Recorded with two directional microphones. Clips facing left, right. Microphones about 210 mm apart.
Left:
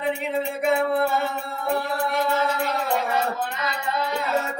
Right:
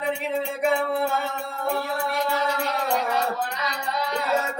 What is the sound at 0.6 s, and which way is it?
Music, centre (ahead or behind).